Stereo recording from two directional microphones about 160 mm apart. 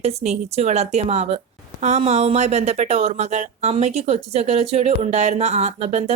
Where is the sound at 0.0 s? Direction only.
40° right (ahead or behind).